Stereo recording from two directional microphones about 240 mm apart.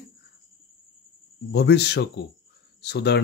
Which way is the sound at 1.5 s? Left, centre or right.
Left.